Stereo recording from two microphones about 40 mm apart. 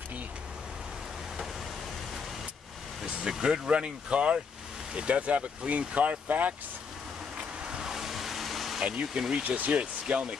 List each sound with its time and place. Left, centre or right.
3.1 s speech: centre; by 6.5 s right
7.6 s vehicle: centre
9.0 s speech: centre
9.3 s speech: right